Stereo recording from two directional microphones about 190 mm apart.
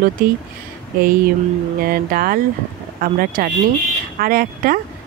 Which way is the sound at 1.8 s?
50° right (ahead or behind).